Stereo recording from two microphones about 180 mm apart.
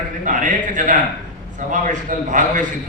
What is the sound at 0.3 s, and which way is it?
A man's voice, 45° right (ahead or behind).